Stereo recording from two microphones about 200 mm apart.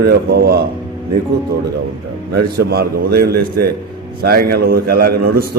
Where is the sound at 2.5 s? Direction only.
50° right (ahead or behind).